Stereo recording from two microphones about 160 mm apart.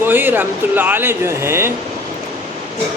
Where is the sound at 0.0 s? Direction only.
10° right (ahead or behind).